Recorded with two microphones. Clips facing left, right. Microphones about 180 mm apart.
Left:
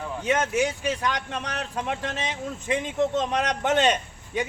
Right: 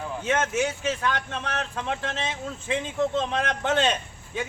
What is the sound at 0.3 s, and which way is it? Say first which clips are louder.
Speech: left 1 dB; 15° left (ahead or behind).